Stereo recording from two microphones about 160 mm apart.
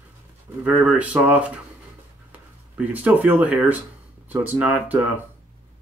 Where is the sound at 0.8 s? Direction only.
10° right (ahead or behind).